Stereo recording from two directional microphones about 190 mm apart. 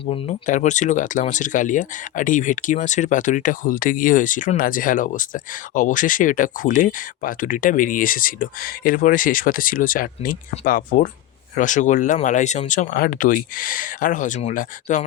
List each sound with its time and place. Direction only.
0.1 s speech: 40° left (ahead or behind)